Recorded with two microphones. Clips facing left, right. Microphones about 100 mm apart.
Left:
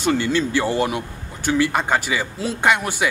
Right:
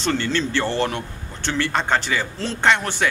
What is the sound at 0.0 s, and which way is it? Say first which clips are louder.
Speech: left 3 dB; 10° left (ahead or behind).